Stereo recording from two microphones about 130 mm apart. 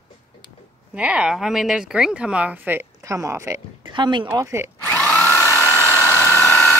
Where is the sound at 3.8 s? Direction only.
35° right (ahead or behind).